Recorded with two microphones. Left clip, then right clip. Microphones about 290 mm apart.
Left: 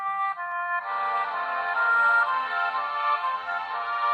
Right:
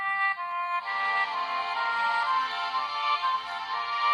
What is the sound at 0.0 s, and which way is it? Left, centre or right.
Music, centre.